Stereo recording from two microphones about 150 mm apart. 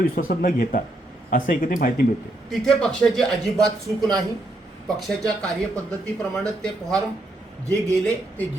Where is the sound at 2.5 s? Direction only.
5° left (ahead or behind).